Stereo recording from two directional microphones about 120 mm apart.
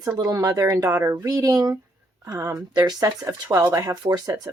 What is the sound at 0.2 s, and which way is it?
Speech, 30° right (ahead or behind).